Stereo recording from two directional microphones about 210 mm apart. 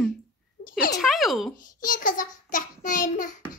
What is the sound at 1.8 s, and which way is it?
A child's voice, 40° left (ahead or behind).